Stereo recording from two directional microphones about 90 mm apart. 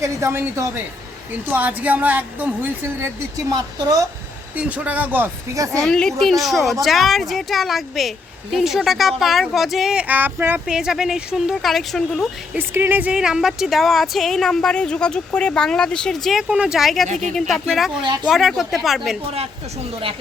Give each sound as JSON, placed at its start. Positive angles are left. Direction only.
{"t": 0.0, "sound": "a woman's voice", "side_deg": -30}
{"t": 3.0, "sound": "speech", "side_deg": -45}
{"t": 4.5, "sound": "a woman's voice", "side_deg": -15}
{"t": 5.5, "sound": "speech", "side_deg": -35}
{"t": 5.8, "sound": "a woman's voice", "side_deg": 5}
{"t": 10.7, "sound": "a woman's voice", "side_deg": -5}
{"t": 12.5, "sound": "a woman's voice", "side_deg": -25}
{"t": 13.1, "sound": "a woman's voice", "side_deg": -5}
{"t": 16.3, "sound": "a woman's voice", "side_deg": -10}
{"t": 19.9, "sound": "speech", "side_deg": -90}